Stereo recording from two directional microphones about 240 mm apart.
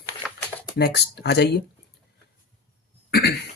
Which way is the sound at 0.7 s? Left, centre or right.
Left.